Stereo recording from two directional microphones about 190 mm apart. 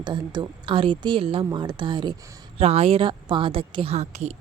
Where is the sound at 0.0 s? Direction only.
25° right (ahead or behind).